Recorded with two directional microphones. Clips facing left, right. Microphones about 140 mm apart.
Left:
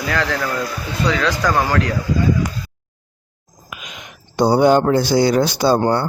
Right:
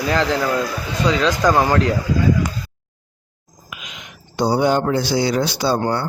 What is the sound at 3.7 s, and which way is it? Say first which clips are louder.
A man's voice: left 2 dB; 50° left (ahead or behind).